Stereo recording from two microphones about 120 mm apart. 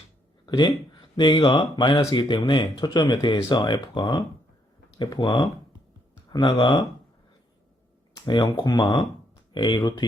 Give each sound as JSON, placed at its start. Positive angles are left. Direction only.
{"t": 0.4, "sound": "speech", "side_deg": 40}
{"t": 8.1, "sound": "speech", "side_deg": 35}